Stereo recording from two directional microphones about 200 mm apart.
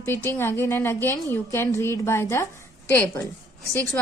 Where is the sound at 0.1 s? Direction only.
10° left (ahead or behind).